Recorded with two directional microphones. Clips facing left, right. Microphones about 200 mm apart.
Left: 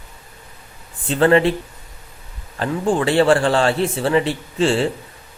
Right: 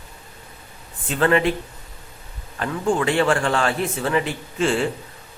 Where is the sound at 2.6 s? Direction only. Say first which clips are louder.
Left 2 dB; 30° left (ahead or behind).